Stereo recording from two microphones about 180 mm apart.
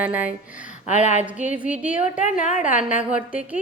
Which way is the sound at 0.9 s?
40° left (ahead or behind).